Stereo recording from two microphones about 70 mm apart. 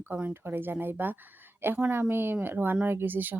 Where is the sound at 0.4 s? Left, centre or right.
Right.